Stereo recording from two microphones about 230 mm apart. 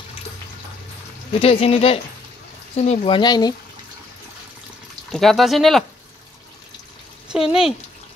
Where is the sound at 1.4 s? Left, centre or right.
Left.